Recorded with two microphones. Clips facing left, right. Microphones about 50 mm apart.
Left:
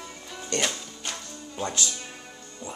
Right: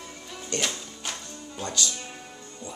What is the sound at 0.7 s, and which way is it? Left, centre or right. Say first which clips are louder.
Music: even; centre.